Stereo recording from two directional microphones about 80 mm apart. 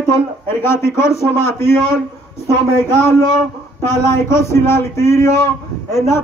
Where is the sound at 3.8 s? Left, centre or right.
Left.